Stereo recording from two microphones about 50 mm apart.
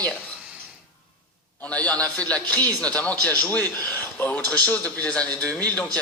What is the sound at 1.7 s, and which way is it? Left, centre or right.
A man's voice, left.